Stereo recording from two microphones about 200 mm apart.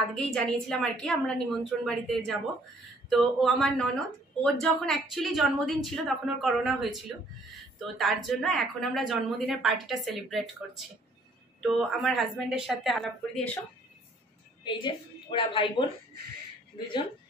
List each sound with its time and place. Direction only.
0.1 s a woman's voice: 5° left (ahead or behind)
8.0 s a woman's voice: centre (ahead or behind)
11.8 s a woman's voice: centre (ahead or behind)
14.6 s a woman's voice: 25° left (ahead or behind)
16.7 s speech: 25° left (ahead or behind)